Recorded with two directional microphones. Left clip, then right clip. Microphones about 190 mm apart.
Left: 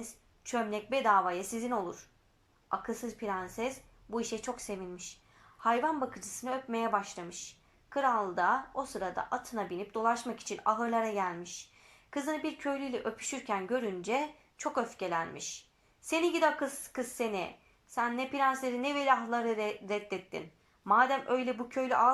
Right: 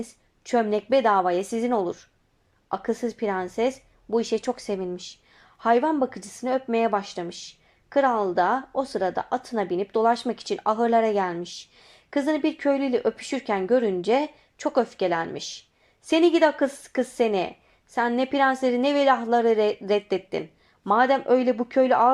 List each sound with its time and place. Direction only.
0.0 s a woman's voice: 25° right (ahead or behind)